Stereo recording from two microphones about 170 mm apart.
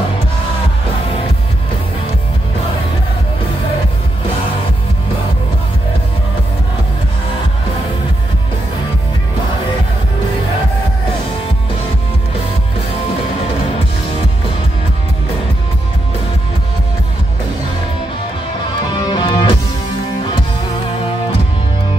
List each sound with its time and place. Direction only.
18.9 s music: 25° left (ahead or behind)